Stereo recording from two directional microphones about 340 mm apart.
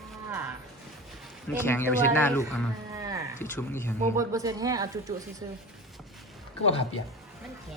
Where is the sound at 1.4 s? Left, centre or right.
Centre.